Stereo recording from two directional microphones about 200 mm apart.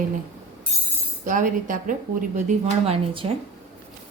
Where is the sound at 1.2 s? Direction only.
40° right (ahead or behind).